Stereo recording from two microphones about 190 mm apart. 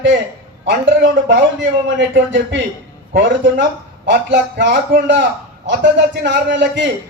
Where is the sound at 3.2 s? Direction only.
70° right (ahead or behind).